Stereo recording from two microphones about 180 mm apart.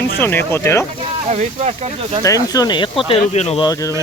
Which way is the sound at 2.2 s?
20° left (ahead or behind).